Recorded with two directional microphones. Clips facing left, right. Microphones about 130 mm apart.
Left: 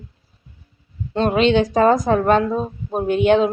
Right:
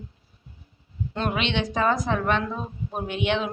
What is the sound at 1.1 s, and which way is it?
A woman's voice, 35° left (ahead or behind).